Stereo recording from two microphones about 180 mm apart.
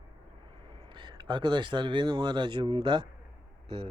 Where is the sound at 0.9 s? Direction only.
25° right (ahead or behind).